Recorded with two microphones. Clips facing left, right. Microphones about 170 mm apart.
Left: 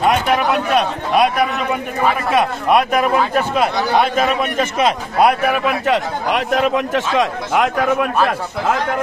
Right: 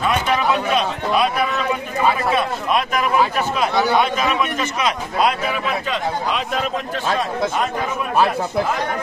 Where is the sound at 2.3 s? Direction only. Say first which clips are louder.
Left 5 dB; 60° left (ahead or behind).